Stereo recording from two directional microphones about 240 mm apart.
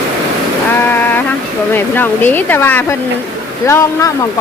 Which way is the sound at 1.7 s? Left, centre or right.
Centre.